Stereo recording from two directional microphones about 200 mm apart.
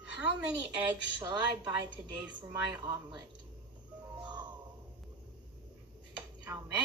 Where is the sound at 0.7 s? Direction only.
20° right (ahead or behind).